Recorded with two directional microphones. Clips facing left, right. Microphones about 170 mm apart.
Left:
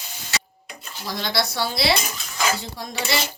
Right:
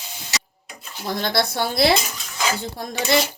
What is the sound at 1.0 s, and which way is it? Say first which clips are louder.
Speech: right 3 dB; 55° right (ahead or behind).